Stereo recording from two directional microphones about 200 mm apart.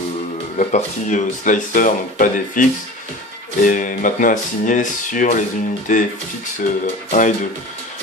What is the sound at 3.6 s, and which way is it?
Speech, 40° left (ahead or behind).